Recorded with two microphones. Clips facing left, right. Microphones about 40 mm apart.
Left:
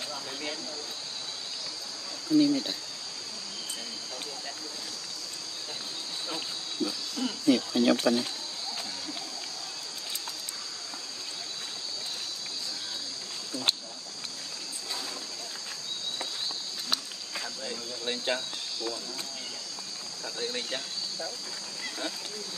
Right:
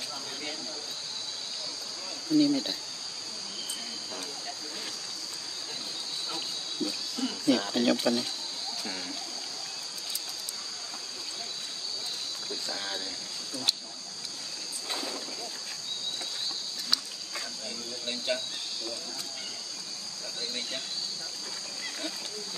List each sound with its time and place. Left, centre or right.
0.1 s hiss: centre
2.2 s speech: centre
6.3 s a sound: centre
7.9 s speech: centre
16.9 s cricket: left